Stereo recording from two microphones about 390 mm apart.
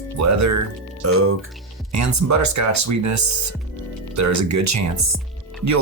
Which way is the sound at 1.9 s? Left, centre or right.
Right.